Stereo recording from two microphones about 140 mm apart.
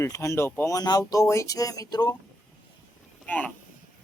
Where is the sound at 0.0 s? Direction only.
20° left (ahead or behind).